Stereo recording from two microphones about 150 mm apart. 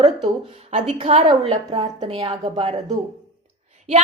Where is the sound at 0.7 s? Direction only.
50° right (ahead or behind).